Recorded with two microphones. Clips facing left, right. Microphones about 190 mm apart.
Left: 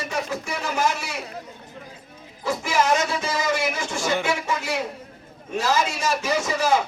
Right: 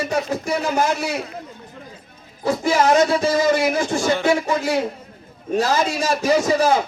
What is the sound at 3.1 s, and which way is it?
A man's voice, 35° right (ahead or behind).